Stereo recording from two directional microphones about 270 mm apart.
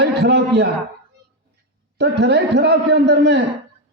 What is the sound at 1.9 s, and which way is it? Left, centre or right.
A man's voice, right.